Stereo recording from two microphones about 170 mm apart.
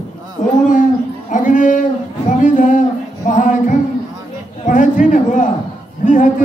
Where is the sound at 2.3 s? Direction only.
50° left (ahead or behind).